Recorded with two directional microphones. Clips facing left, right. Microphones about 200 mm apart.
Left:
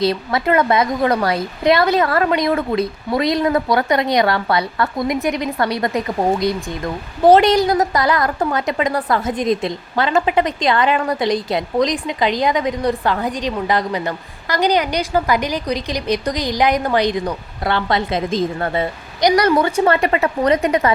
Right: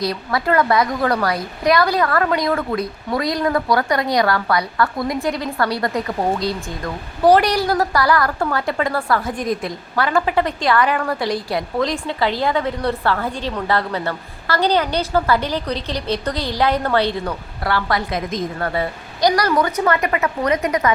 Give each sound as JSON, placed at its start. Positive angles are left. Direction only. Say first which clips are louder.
{"t": 0.0, "sound": "a woman's voice", "louder": "left 3 dB", "side_deg": 25}